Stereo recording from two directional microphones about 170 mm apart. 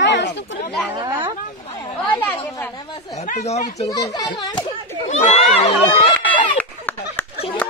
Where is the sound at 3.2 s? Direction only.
45° left (ahead or behind).